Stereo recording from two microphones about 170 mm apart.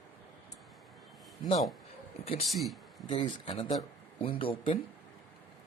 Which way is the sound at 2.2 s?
35° left (ahead or behind).